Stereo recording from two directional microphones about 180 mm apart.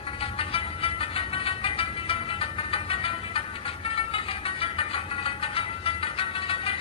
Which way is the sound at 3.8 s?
30° left (ahead or behind).